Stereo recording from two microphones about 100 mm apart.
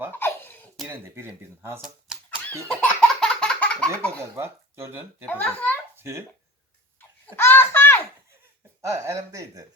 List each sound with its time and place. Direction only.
0.1 s giggle: 20° left (ahead or behind)
0.9 s speech: 25° right (ahead or behind)
1.8 s typewriter: 10° right (ahead or behind)
2.6 s laughter: 10° left (ahead or behind)
3.9 s a child's voice: 10° left (ahead or behind)
4.2 s speech: 25° right (ahead or behind)
5.3 s a child's voice: 15° left (ahead or behind)
6.0 s speech: 25° right (ahead or behind)
7.3 s a sound: 25° left (ahead or behind)
8.9 s speech: 30° right (ahead or behind)